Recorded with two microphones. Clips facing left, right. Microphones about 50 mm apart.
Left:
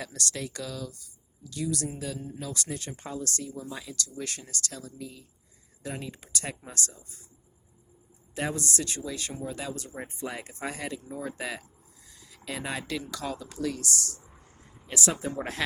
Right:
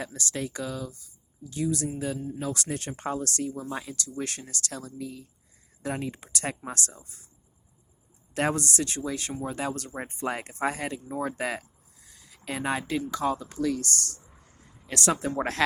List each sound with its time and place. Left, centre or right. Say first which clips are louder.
0.0 s speech: right 2 dB; right
2.1 s speech: right 4 dB; centre
2.4 s a woman's voice: right 4 dB; right
8.4 s a woman's voice: right 4 dB; right
12.0 s a sound: right 2 dB; right
13.2 s a woman's voice: right 5 dB; right
14.8 s speech: right 3 dB; right
15.4 s speech: right 5 dB; right